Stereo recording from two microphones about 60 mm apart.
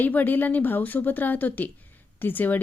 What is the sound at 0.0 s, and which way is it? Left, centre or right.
Speech, left.